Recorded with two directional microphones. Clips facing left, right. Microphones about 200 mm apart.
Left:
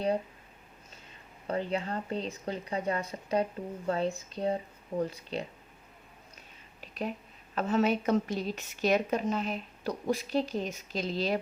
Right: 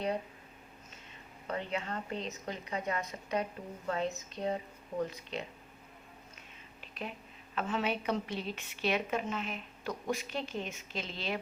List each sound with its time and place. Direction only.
1.5 s a woman's voice: 35° left (ahead or behind)
6.8 s a sound: 40° left (ahead or behind)
7.5 s a woman's voice: 40° left (ahead or behind)